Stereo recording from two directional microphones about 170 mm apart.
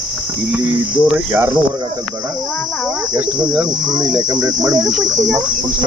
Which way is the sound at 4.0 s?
25° right (ahead or behind).